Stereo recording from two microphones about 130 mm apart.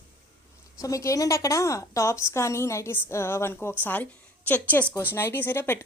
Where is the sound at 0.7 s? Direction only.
25° left (ahead or behind).